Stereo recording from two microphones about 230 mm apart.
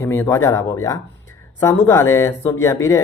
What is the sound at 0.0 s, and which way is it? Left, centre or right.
Speech, centre.